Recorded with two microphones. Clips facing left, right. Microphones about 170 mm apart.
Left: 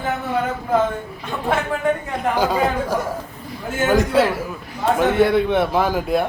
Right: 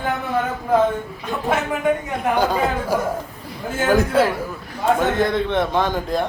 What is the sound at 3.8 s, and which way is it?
A man's voice, centre (ahead or behind).